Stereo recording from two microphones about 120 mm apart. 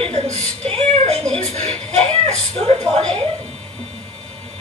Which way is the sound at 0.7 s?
65° right (ahead or behind).